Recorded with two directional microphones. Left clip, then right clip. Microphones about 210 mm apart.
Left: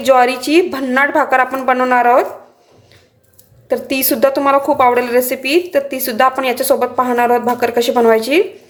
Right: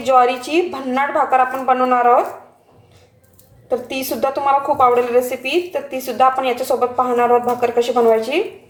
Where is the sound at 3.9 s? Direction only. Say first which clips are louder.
Left 10 dB; 40° left (ahead or behind).